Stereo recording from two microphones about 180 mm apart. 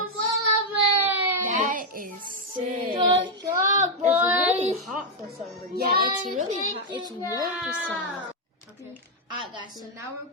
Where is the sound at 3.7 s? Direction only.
45° right (ahead or behind).